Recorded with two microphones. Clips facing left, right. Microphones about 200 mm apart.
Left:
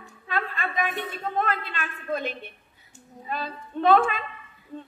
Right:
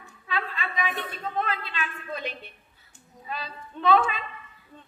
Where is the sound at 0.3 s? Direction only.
50° left (ahead or behind).